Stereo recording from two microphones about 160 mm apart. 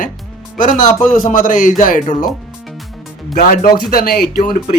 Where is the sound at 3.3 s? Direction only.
60° left (ahead or behind).